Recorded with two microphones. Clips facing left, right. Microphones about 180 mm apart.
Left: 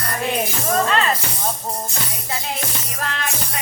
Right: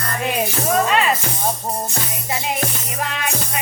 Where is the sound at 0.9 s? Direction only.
10° right (ahead or behind).